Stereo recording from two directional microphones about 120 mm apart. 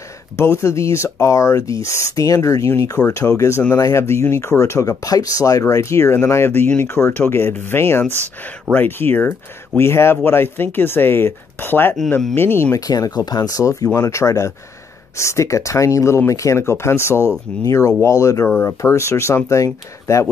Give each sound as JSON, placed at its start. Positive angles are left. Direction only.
{"t": 0.4, "sound": "speech", "side_deg": 20}
{"t": 12.8, "sound": "speech", "side_deg": 30}